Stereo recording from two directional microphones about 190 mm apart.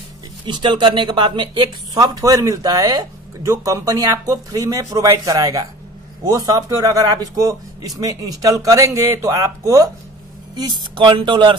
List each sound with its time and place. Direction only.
0.5 s speech: 25° right (ahead or behind)